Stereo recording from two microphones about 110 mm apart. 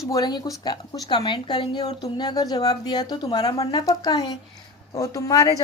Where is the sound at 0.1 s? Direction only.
35° left (ahead or behind).